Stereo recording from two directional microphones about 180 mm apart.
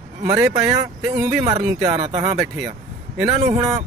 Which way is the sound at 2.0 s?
35° right (ahead or behind).